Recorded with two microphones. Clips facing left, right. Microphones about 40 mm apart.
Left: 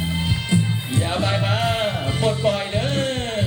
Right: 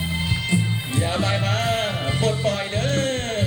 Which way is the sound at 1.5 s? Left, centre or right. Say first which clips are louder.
Left 1 dB; centre.